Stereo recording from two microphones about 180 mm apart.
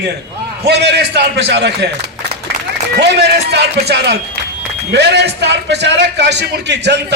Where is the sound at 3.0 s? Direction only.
70° right (ahead or behind).